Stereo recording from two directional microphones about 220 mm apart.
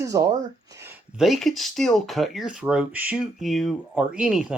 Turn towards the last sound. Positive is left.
turn(degrees=-5)  # may be behind; listen again after turning